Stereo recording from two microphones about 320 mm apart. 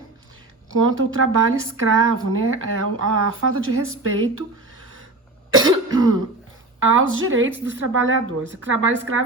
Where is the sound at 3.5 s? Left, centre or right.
Right.